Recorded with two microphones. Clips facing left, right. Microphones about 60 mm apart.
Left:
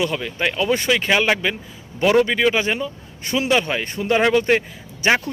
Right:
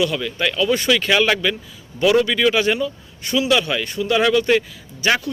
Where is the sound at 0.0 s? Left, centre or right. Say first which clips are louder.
Right 1 dB; left.